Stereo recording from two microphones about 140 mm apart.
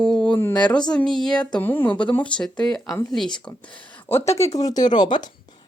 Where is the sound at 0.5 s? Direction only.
5° left (ahead or behind).